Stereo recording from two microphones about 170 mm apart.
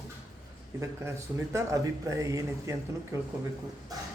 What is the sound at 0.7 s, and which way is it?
A man's voice, 15° right (ahead or behind).